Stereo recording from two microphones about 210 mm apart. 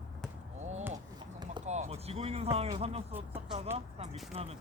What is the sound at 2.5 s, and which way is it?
Speech, 30° right (ahead or behind).